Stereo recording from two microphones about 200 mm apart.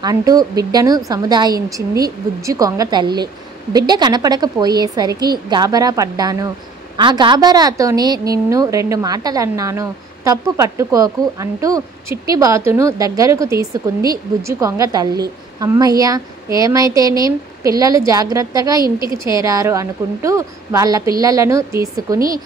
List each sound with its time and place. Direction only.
0.0 s a woman's voice: 20° right (ahead or behind)